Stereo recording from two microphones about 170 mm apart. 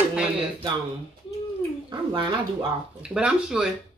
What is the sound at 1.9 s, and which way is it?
Speech, 30° right (ahead or behind).